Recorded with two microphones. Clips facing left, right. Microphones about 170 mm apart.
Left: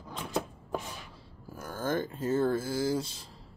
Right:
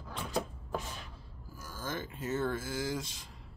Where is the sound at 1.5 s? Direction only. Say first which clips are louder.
Left 8 dB; 60° left (ahead or behind); by 3.3 s 30° left (ahead or behind).